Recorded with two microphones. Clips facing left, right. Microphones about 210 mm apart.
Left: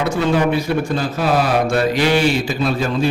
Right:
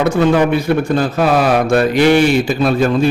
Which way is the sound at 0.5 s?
55° right (ahead or behind).